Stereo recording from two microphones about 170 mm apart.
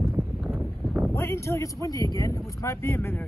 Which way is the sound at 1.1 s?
15° left (ahead or behind).